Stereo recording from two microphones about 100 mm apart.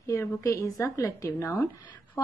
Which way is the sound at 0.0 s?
35° left (ahead or behind).